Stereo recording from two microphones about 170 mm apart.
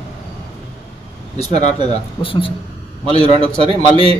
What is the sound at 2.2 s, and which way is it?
Speech, 30° left (ahead or behind).